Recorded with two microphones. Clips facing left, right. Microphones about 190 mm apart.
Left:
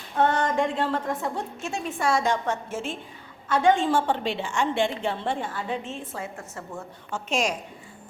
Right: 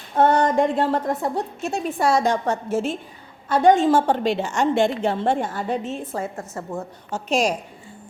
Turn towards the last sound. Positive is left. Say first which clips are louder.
# right 5 dB
turn(degrees=-35)  # may be behind; listen again after turning